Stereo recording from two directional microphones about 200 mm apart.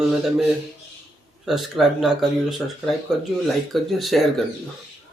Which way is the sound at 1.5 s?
Centre (ahead or behind).